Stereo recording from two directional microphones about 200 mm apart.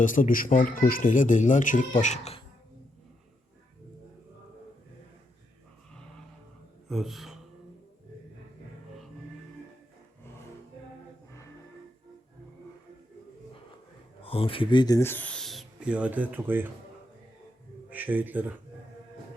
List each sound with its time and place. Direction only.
0.0 s speech: 40° left (ahead or behind)
6.8 s speech: centre (ahead or behind)
14.2 s speech: 30° left (ahead or behind); by 16.6 s 10° right (ahead or behind)
17.9 s speech: 10° right (ahead or behind)